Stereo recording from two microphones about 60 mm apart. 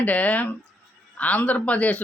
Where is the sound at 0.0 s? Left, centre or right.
Left.